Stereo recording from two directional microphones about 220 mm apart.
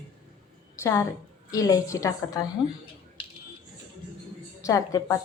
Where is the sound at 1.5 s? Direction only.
15° left (ahead or behind).